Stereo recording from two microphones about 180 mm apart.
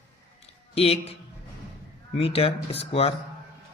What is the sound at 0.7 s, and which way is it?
Speech, 35° left (ahead or behind).